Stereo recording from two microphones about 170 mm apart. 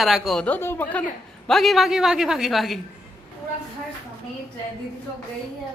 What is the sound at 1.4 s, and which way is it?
A man's voice, centre (ahead or behind).